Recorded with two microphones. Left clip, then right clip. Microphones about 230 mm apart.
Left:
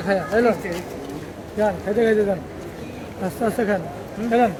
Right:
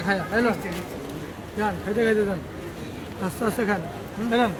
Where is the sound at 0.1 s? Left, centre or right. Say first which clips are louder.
Left 5 dB; right.